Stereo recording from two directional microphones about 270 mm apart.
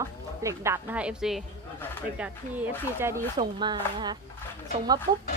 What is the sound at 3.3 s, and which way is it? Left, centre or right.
Speech, centre.